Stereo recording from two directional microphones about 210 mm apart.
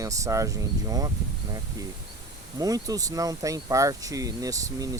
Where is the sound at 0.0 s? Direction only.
15° right (ahead or behind).